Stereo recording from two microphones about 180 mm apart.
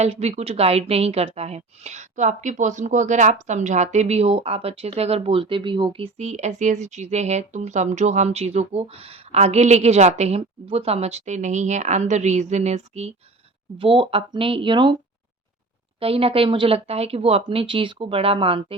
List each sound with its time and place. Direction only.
0.0 s a woman's voice: 35° right (ahead or behind)
16.0 s a woman's voice: 30° right (ahead or behind)